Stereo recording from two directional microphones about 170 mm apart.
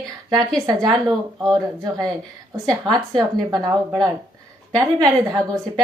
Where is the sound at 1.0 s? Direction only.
Centre (ahead or behind).